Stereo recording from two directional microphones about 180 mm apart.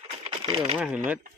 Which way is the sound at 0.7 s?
5° right (ahead or behind).